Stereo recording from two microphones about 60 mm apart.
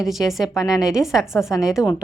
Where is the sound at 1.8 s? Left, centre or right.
Left.